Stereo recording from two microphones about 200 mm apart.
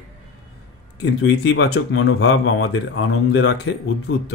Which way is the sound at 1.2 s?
60° left (ahead or behind).